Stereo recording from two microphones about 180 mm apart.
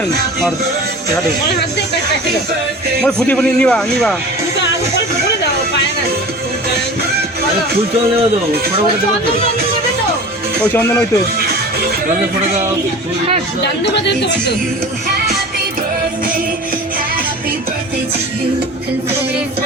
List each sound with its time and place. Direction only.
3.0 s a man's voice: 5° left (ahead or behind)
11.3 s music: 55° right (ahead or behind)
13.6 s speech: 75° left (ahead or behind)